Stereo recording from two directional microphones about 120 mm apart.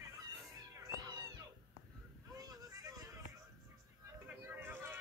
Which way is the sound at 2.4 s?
30° right (ahead or behind).